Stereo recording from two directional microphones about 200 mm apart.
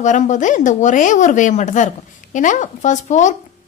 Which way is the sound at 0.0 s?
40° left (ahead or behind).